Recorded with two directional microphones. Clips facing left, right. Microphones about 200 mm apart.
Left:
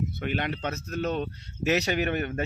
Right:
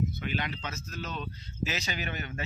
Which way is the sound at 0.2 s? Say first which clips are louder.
Left 5 dB; 60° left (ahead or behind).